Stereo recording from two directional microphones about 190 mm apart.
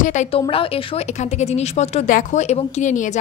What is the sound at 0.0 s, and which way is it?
Speech, 40° left (ahead or behind).